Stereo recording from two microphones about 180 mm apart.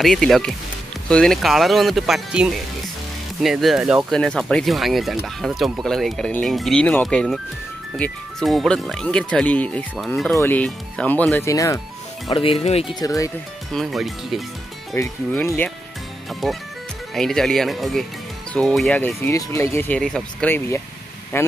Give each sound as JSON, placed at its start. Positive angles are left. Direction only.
{"t": 0.0, "sound": "speech", "side_deg": 0}
{"t": 12.3, "sound": "speech", "side_deg": 30}
{"t": 13.0, "sound": "speech", "side_deg": 20}
{"t": 13.7, "sound": "speech", "side_deg": 0}
{"t": 15.0, "sound": "speech", "side_deg": 15}